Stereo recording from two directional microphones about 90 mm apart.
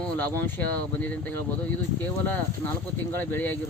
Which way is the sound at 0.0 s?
20° left (ahead or behind).